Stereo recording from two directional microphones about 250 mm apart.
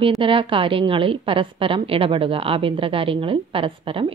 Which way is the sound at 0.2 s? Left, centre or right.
Right.